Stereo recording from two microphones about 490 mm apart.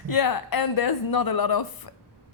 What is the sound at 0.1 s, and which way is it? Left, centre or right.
A woman's voice, left.